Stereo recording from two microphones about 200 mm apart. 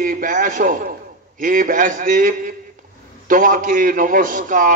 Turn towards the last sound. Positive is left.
turn(degrees=-40)  # may be behind; listen again after turning